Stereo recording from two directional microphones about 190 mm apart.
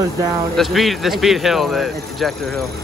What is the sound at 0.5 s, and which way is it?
Speech, centre (ahead or behind).